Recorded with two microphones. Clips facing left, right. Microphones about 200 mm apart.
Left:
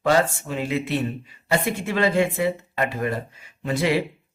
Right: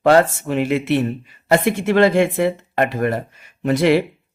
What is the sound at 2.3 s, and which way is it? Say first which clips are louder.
Speech: right 5 dB; 60° right (ahead or behind).